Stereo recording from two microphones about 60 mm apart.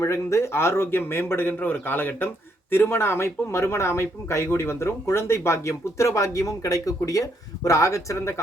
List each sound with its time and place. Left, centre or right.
0.0 s a man's voice: left